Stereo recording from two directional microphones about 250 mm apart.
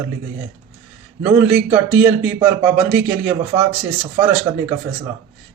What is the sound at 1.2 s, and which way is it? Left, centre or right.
A man's voice, centre.